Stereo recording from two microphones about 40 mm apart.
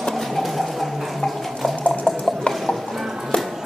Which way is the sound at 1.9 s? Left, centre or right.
Centre.